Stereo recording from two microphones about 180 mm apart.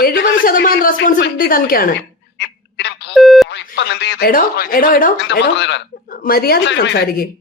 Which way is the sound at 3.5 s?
70° left (ahead or behind).